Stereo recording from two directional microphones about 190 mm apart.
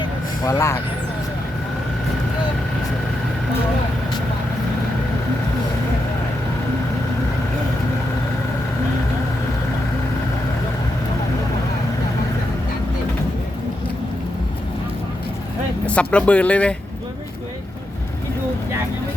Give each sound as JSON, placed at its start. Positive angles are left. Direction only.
{"t": 0.4, "sound": "speech", "side_deg": 15}
{"t": 15.9, "sound": "speech", "side_deg": 5}